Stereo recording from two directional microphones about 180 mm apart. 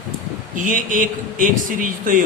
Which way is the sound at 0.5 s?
45° right (ahead or behind).